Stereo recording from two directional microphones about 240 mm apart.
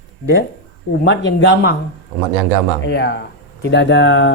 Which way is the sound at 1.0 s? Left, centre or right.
Left.